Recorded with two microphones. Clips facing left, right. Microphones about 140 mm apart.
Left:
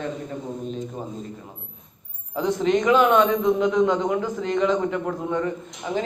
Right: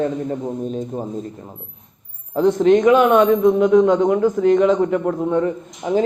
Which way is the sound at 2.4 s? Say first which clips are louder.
Right 8 dB; 50° right (ahead or behind).